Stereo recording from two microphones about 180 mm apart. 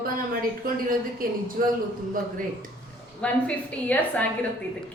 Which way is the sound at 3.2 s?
5° left (ahead or behind).